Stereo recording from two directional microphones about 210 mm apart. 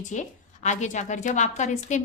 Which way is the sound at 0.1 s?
35° left (ahead or behind).